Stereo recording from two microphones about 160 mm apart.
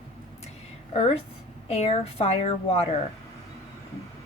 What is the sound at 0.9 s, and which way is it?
Speech, 40° left (ahead or behind).